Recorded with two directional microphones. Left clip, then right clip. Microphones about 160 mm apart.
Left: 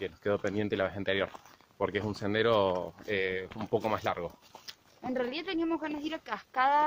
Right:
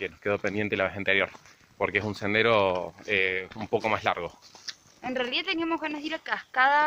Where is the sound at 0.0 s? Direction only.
15° right (ahead or behind).